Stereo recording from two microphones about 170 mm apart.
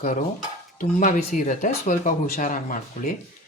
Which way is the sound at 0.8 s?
50° left (ahead or behind).